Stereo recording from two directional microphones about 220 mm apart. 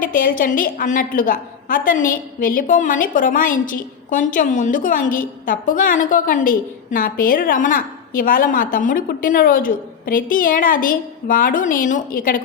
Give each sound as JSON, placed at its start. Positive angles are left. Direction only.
{"t": 0.0, "sound": "a woman's voice", "side_deg": 40}